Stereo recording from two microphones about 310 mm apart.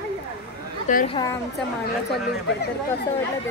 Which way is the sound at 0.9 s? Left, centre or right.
Left.